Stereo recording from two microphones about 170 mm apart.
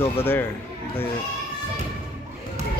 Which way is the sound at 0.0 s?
15° left (ahead or behind).